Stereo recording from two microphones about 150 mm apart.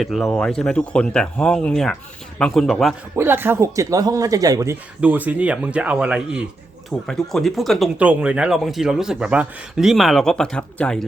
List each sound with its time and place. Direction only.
0.0 s speech: centre (ahead or behind)
3.2 s speech: 15° right (ahead or behind)
4.9 s speech: 10° right (ahead or behind); by 11.0 s 10° left (ahead or behind)